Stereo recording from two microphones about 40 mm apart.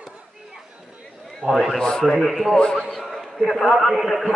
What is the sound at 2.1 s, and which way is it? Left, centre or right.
Speech, centre.